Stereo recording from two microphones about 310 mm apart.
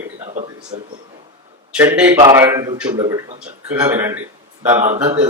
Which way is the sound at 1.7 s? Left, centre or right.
Centre.